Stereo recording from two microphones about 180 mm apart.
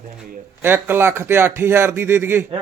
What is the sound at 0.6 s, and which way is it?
Speech, 15° right (ahead or behind).